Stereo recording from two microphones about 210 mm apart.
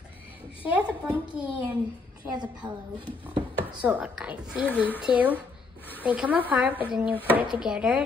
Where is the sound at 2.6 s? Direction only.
20° right (ahead or behind).